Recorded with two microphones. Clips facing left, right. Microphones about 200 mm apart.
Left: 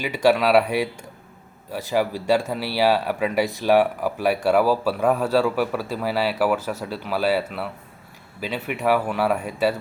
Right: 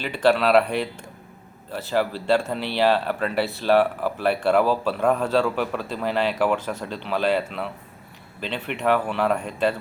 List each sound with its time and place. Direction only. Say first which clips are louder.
0.0 s speech: left 1 dB; 10° left (ahead or behind)